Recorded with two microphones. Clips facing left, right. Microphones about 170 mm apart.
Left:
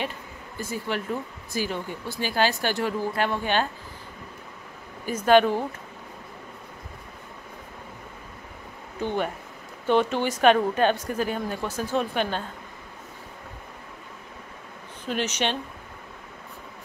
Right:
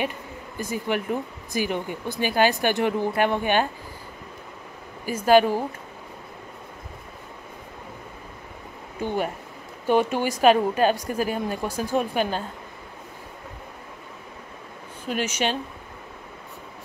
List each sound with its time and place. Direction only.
0.6 s speech: 15° right (ahead or behind)
5.0 s speech: 10° right (ahead or behind)
9.0 s speech: 10° right (ahead or behind)
15.0 s speech: 10° right (ahead or behind)